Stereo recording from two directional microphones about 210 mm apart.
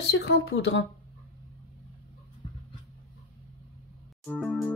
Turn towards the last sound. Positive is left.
turn(degrees=5)  # may be behind; listen again after turning